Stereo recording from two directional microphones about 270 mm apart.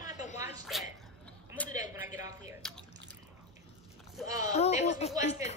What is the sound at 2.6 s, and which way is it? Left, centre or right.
Drip, centre.